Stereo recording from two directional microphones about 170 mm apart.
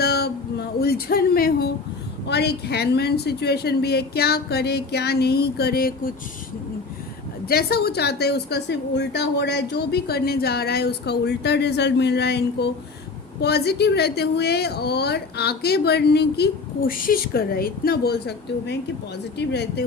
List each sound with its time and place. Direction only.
0.0 s a sound: 70° left (ahead or behind)
0.8 s speech: 65° left (ahead or behind)
2.2 s a woman's voice: 75° left (ahead or behind); by 6.1 s 60° left (ahead or behind)
7.4 s a woman's voice: 65° left (ahead or behind)